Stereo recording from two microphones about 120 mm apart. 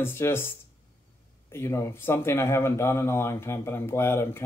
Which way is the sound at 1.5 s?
25° left (ahead or behind).